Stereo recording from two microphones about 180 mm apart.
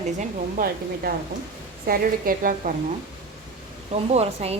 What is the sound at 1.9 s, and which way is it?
Speech, 55° right (ahead or behind).